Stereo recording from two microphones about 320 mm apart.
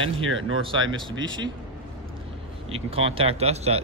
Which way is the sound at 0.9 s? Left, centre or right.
Centre.